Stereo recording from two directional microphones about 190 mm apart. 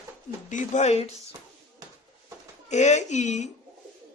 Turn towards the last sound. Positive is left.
turn(degrees=40)  # may be behind; listen again after turning